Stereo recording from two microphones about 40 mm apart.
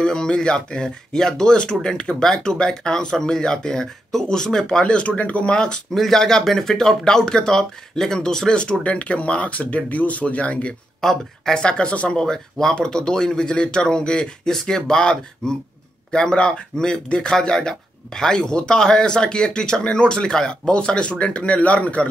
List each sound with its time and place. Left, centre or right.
0.0 s speech: centre; by 5.5 s left
5.5 s speech: left
5.9 s speech: centre
8.8 s speech: left
11.0 s speech: centre
11.6 s speech: left
12.2 s speech: centre; by 22.0 s left